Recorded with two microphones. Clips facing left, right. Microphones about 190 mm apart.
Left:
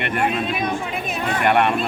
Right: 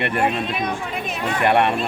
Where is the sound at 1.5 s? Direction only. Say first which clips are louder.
Even; 30° right (ahead or behind).